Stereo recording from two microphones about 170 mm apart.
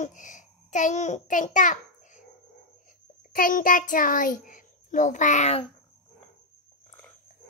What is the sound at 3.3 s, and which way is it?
A child's voice, 55° left (ahead or behind).